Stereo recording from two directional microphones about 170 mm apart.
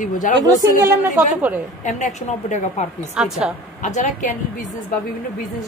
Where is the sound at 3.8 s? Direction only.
45° left (ahead or behind).